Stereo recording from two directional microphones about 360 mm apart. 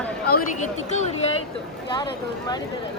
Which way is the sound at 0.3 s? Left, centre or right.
Left.